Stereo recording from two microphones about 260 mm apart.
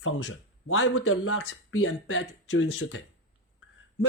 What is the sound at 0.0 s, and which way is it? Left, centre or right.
Speech, left.